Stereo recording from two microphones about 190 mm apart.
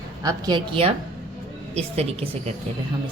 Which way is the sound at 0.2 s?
20° right (ahead or behind).